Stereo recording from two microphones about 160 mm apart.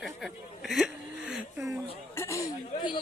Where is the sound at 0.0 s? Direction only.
Centre (ahead or behind).